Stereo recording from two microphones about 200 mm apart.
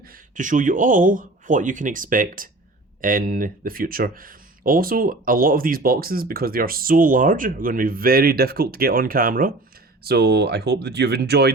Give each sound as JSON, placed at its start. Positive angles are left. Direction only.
{"t": 0.1, "sound": "speech", "side_deg": -40}